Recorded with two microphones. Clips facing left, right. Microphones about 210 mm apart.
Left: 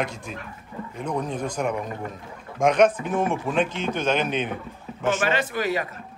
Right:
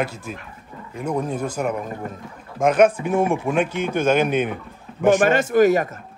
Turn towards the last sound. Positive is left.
turn(degrees=-45)  # may be behind; listen again after turning